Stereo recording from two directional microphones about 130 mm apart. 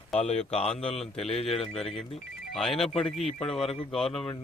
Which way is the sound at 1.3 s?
50° left (ahead or behind).